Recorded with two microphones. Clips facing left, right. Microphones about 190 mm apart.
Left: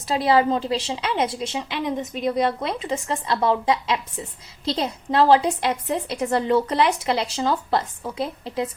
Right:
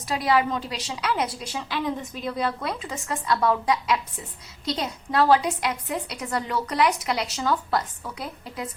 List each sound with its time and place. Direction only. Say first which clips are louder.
0.1 s a woman's voice: left 4 dB; 30° left (ahead or behind)